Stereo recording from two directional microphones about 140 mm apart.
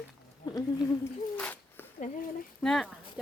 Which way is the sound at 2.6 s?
5° left (ahead or behind).